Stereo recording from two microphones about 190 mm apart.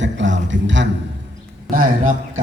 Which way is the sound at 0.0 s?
75° right (ahead or behind).